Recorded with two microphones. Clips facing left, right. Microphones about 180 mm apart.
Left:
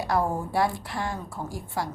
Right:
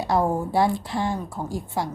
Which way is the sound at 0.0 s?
25° right (ahead or behind).